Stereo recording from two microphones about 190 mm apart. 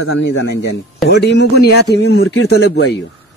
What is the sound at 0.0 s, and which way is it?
A man's voice, 70° left (ahead or behind).